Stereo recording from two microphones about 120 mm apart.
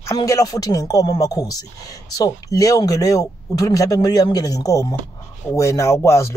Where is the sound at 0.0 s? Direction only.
30° left (ahead or behind).